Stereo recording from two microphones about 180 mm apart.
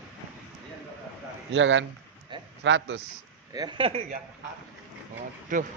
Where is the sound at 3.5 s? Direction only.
20° right (ahead or behind).